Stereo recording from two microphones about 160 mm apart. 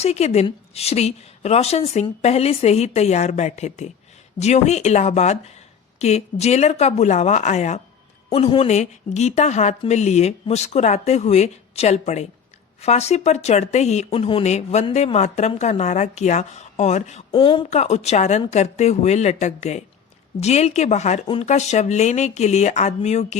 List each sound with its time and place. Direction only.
0.0 s a woman's voice: 40° left (ahead or behind)
17.3 s a woman's voice: 30° left (ahead or behind)
17.7 s speech: 45° left (ahead or behind)